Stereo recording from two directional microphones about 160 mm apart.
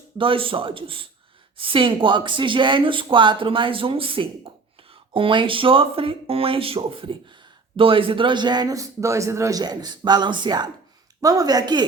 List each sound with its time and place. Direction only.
0.2 s a man's voice: 35° right (ahead or behind)